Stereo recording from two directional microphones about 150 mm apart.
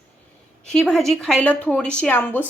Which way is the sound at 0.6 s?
5° left (ahead or behind).